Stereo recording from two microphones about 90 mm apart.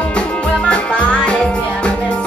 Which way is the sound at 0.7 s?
10° left (ahead or behind).